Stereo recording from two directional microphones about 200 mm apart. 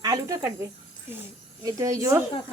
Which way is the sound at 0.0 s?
15° right (ahead or behind).